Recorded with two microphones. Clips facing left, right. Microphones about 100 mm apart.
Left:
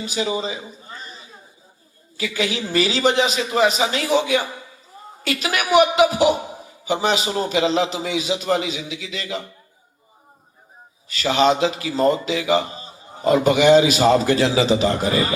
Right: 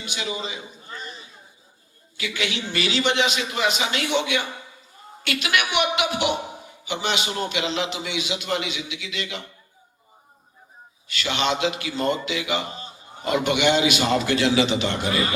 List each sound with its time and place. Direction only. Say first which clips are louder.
0.0 s a man's voice: left 7 dB; 35° left (ahead or behind)
11.1 s a man's voice: left 7 dB; 35° left (ahead or behind)